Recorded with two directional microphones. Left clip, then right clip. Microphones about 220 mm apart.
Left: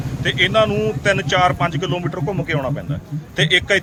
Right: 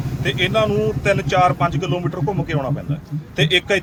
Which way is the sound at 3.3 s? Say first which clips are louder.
Left 2 dB; 5° left (ahead or behind).